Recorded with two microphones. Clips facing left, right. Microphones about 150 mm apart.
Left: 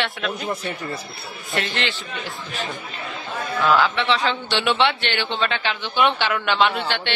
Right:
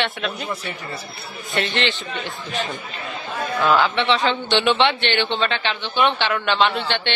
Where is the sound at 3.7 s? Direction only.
Centre (ahead or behind).